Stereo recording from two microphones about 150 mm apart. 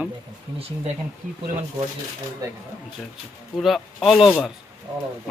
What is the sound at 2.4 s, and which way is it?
Speech, 20° right (ahead or behind).